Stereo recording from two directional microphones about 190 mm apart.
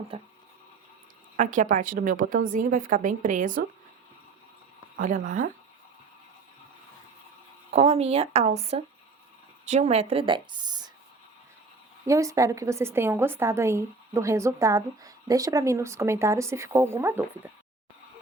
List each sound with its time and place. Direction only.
0.1 s speech: 30° right (ahead or behind)
1.4 s a woman's voice: 40° right (ahead or behind)
4.9 s a woman's voice: 40° right (ahead or behind)
7.7 s speech: 35° right (ahead or behind)
12.0 s a woman's voice: 15° right (ahead or behind)